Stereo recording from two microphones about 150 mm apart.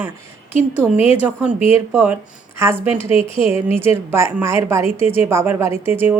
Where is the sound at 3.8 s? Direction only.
15° right (ahead or behind).